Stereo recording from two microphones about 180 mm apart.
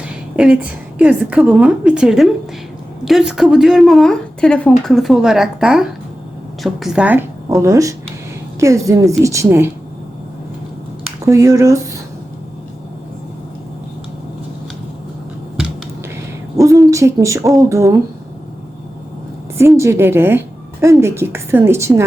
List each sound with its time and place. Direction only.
0.3 s a woman's voice: 5° right (ahead or behind)
11.3 s a woman's voice: 15° right (ahead or behind)
16.6 s a sound: 20° right (ahead or behind)
19.5 s a woman's voice: 15° right (ahead or behind)